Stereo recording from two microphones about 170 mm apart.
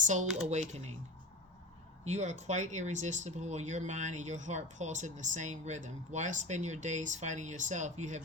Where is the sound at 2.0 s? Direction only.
45° right (ahead or behind).